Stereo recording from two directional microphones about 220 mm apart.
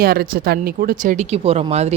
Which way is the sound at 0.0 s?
45° right (ahead or behind).